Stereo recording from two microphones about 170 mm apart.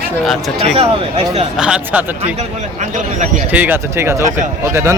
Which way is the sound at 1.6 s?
5° right (ahead or behind).